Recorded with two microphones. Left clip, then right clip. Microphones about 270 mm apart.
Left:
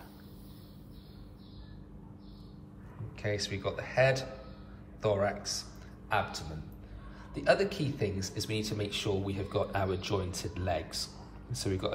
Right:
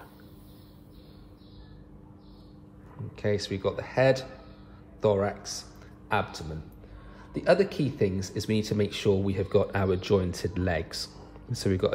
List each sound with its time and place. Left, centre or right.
3.2 s a man's voice: right